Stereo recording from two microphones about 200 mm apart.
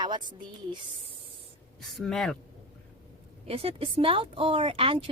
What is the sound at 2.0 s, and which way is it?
Speech, centre (ahead or behind).